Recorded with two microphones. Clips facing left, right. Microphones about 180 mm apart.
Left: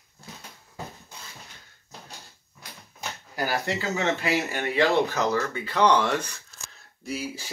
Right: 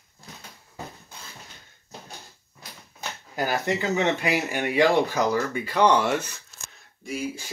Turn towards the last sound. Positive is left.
turn(degrees=0)  # may be behind; listen again after turning